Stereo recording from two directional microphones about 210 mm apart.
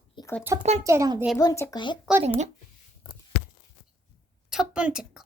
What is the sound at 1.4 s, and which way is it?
Speech, 15° left (ahead or behind).